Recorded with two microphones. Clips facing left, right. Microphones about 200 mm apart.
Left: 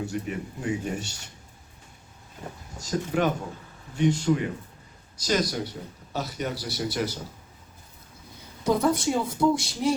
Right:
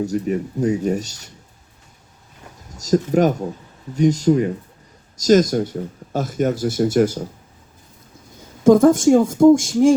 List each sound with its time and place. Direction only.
0.0 s speech: 40° right (ahead or behind)
2.7 s speech: 40° right (ahead or behind)
8.6 s speech: 45° right (ahead or behind)